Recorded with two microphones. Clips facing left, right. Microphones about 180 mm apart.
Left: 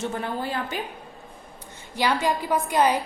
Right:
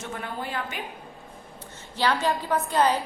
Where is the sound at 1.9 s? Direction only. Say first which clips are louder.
Left 1 dB; 10° left (ahead or behind).